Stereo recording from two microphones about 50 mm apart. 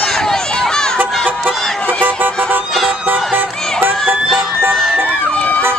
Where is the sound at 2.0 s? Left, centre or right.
Right.